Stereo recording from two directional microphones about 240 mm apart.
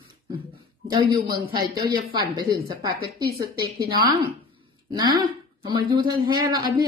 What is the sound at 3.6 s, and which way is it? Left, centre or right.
A woman's voice, centre.